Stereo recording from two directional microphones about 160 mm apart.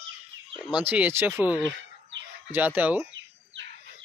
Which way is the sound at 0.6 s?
10° right (ahead or behind).